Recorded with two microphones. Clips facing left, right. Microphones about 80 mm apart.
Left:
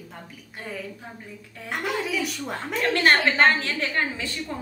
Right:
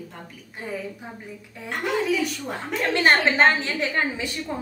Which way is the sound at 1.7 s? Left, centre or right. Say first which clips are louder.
Right 3 dB; centre.